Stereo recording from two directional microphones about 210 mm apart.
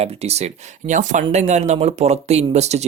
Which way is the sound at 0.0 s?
30° right (ahead or behind).